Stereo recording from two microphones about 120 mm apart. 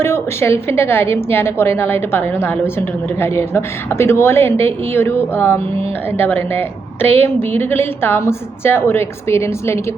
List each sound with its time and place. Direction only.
0.0 s a woman's voice: 20° left (ahead or behind)